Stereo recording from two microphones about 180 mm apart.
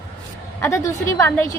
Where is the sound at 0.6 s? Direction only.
15° left (ahead or behind).